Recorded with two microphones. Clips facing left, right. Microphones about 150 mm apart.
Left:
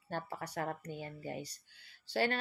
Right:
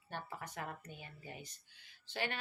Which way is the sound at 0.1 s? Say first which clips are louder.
Left 6 dB; 40° left (ahead or behind).